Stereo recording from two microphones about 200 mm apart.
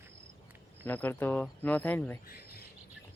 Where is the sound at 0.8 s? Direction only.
10° left (ahead or behind).